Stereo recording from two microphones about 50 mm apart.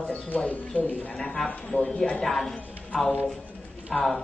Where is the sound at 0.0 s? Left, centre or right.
Centre.